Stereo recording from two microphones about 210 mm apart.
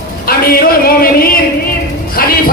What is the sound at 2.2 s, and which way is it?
Music, 45° left (ahead or behind).